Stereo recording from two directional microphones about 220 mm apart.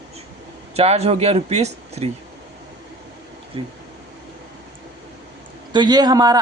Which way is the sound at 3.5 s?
25° right (ahead or behind).